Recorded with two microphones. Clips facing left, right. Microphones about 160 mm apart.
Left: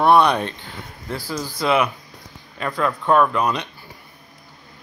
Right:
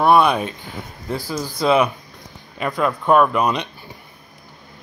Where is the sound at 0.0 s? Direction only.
5° right (ahead or behind).